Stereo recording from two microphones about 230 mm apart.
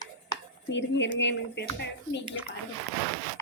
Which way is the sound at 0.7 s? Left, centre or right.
Left.